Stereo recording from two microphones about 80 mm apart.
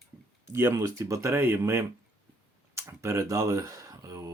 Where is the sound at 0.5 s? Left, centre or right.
Right.